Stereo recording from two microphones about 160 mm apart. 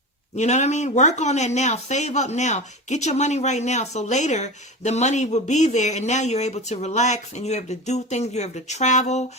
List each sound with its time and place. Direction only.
0.3 s speech: 45° left (ahead or behind)